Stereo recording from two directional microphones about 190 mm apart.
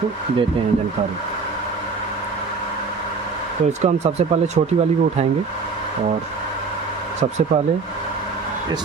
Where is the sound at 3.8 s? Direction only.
35° right (ahead or behind).